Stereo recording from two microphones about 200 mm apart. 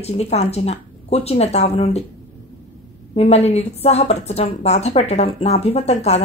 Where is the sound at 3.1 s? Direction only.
30° left (ahead or behind).